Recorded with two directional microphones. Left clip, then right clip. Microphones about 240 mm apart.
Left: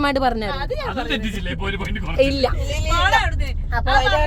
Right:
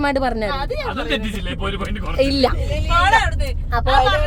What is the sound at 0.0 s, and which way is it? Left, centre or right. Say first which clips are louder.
Speech: even; centre.